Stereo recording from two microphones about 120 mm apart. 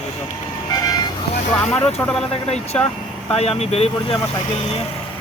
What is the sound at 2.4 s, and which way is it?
Speech, 60° left (ahead or behind).